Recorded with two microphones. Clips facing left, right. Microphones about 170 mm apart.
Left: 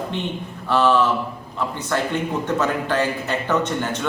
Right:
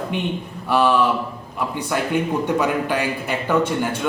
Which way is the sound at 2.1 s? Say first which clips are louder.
Right 3 dB; 15° right (ahead or behind).